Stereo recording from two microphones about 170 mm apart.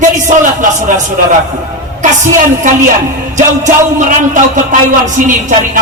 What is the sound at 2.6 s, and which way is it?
Speech, 50° right (ahead or behind).